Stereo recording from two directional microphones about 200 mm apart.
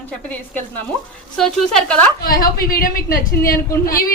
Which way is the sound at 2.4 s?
50° left (ahead or behind).